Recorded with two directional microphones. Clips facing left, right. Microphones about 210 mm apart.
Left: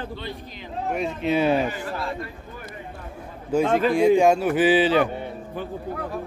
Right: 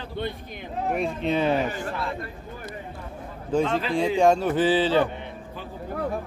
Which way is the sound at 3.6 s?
50° left (ahead or behind).